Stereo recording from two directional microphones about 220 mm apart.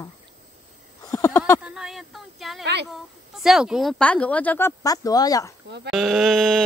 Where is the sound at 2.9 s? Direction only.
Centre (ahead or behind); by 5.5 s 15° left (ahead or behind).